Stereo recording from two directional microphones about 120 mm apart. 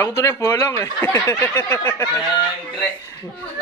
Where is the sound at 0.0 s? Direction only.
20° left (ahead or behind).